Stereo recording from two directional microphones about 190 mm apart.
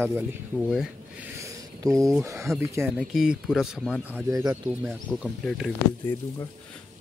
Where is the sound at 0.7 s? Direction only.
10° right (ahead or behind).